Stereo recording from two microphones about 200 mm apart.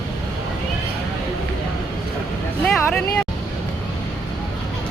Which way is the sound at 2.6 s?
5° left (ahead or behind).